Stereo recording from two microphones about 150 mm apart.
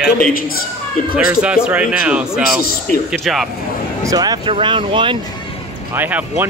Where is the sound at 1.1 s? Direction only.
5° right (ahead or behind).